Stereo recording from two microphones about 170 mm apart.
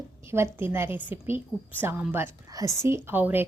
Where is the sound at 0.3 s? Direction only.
15° right (ahead or behind).